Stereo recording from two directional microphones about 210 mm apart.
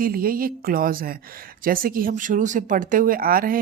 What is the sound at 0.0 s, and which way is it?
A woman's voice, 45° right (ahead or behind).